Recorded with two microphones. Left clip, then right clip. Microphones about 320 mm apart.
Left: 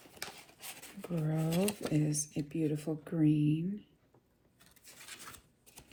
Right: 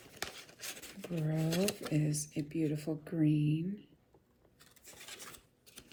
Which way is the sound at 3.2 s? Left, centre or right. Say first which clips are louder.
Left 3 dB; centre.